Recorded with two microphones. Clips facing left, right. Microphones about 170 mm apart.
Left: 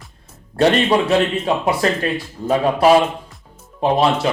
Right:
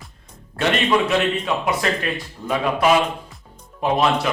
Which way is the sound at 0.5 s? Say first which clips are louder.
Left 4 dB; 35° left (ahead or behind).